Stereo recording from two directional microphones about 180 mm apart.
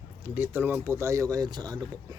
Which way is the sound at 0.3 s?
10° right (ahead or behind).